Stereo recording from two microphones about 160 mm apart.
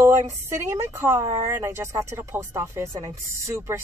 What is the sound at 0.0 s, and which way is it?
A woman's voice, 15° right (ahead or behind).